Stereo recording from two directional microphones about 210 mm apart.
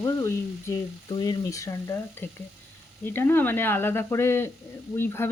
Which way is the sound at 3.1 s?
10° left (ahead or behind).